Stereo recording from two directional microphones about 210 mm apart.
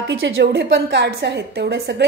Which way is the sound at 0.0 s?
50° right (ahead or behind).